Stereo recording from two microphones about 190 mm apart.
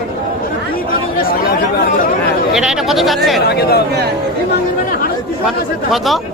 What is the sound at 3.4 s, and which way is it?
Speech, 60° left (ahead or behind).